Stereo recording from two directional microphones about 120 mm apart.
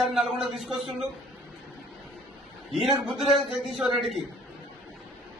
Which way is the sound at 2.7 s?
Centre (ahead or behind).